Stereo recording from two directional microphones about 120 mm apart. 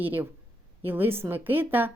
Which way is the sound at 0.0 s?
15° right (ahead or behind).